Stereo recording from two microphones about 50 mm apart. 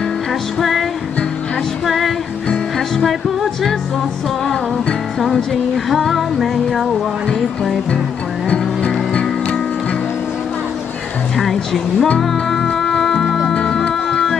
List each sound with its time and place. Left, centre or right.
0.6 s music: centre
1.9 s music: centre
5.9 s music: centre
8.5 s music: left
11.3 s music: centre
13.5 s music: centre